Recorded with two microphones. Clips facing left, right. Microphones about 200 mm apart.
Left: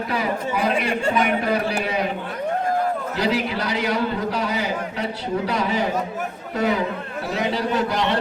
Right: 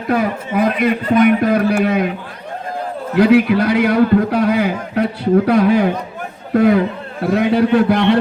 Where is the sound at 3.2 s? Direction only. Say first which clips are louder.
Right 14 dB; 55° right (ahead or behind).